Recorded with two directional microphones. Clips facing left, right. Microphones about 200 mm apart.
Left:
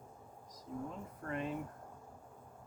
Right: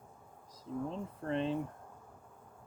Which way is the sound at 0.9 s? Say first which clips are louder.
Right 6 dB; 25° right (ahead or behind).